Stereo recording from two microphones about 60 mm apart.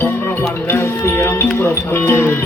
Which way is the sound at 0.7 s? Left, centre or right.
Left.